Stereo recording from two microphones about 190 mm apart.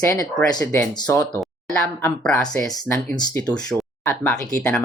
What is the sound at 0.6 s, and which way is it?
Speech, 10° left (ahead or behind).